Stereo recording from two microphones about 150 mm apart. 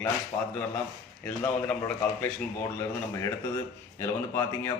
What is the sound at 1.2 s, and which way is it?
A man's voice, 10° left (ahead or behind).